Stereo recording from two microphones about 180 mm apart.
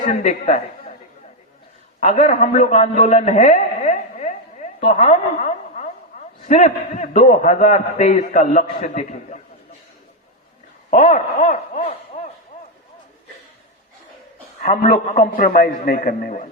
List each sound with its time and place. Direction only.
0.0 s a woman's voice: 40° left (ahead or behind)
2.0 s a sound: 45° left (ahead or behind)
6.4 s a man's voice: 40° left (ahead or behind)
10.9 s a man's voice: 45° left (ahead or behind)
11.9 s a sound: 40° left (ahead or behind)
14.6 s a man's voice: 45° left (ahead or behind)